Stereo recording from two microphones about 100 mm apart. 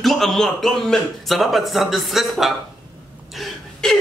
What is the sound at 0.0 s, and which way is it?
A man's voice, centre (ahead or behind).